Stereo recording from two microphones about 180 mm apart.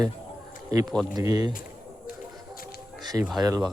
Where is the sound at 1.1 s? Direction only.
20° right (ahead or behind).